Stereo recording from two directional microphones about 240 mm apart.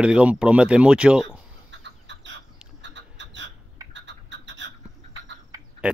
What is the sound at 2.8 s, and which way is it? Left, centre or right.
Frog, right.